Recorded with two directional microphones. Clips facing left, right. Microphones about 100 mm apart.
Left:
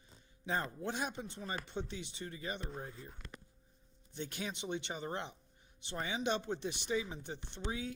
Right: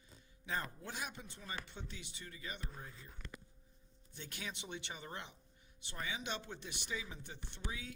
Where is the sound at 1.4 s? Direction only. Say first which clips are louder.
Left 4 dB; 40° left (ahead or behind).